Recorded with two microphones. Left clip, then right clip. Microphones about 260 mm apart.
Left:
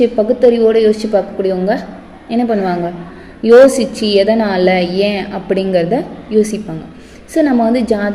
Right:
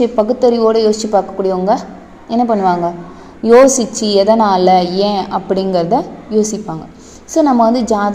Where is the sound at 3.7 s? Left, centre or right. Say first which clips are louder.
Even; centre.